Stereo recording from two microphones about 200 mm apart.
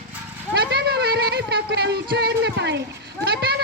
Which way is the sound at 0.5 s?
55° right (ahead or behind).